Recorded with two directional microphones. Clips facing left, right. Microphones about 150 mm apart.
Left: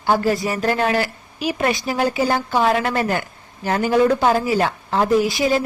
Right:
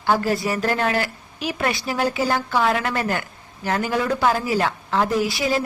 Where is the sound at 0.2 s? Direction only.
20° left (ahead or behind).